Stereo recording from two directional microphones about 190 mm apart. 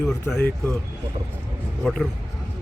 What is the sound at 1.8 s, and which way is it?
Speech, 5° left (ahead or behind).